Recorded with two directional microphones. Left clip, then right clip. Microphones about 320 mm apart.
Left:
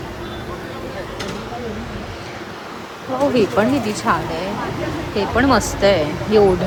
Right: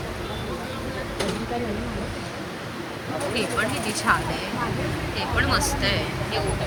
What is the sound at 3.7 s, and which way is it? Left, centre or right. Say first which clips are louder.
Speech: left 4 dB; centre.